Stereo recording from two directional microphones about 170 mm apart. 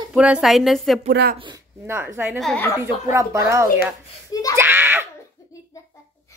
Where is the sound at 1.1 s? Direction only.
65° right (ahead or behind).